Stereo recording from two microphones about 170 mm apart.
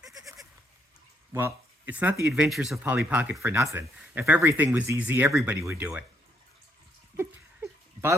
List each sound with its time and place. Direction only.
0.1 s goat: 20° right (ahead or behind)
1.3 s speech: 15° right (ahead or behind)
7.2 s a sound: 15° right (ahead or behind)